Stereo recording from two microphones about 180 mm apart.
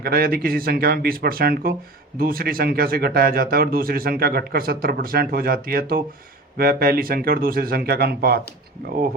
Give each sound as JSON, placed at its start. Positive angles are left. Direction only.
{"t": 0.0, "sound": "speech", "side_deg": -55}